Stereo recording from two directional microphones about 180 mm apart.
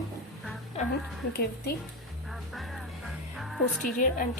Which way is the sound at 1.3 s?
60° left (ahead or behind).